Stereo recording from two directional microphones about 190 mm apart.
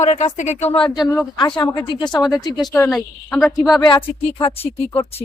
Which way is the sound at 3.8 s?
20° left (ahead or behind).